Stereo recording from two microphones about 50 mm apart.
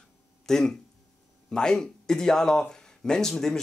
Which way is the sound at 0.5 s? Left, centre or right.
Centre.